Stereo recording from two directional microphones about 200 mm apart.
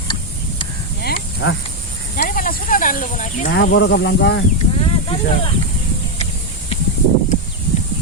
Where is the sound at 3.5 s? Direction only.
55° left (ahead or behind).